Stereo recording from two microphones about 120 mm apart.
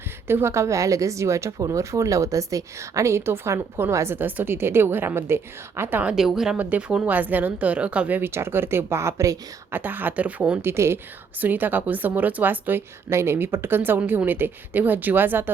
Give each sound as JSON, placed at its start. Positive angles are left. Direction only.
{"t": 0.3, "sound": "a woman's voice", "side_deg": -20}
{"t": 9.8, "sound": "a woman's voice", "side_deg": -15}